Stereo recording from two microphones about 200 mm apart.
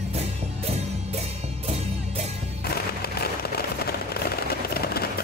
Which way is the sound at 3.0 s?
50° left (ahead or behind).